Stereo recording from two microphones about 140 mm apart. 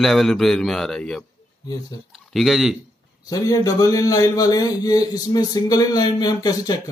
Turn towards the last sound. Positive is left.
turn(degrees=25)  # may be behind; listen again after turning